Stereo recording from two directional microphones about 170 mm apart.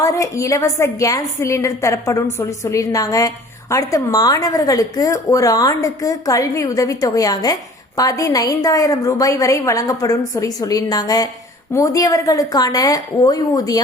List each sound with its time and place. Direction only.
0.0 s a woman's voice: 20° left (ahead or behind)